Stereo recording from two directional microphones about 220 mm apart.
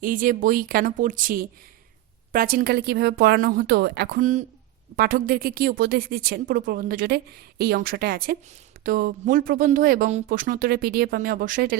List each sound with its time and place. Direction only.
0.0 s speech: 40° right (ahead or behind)
4.2 s speech: 35° right (ahead or behind)